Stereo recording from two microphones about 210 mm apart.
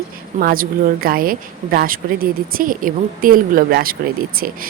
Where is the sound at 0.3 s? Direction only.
40° right (ahead or behind).